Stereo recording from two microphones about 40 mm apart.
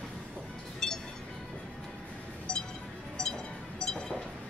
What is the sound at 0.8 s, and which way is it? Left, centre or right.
Chink, centre.